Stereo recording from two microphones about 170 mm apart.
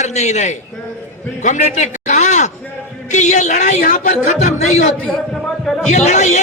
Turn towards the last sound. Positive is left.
turn(degrees=45)  # may be behind; listen again after turning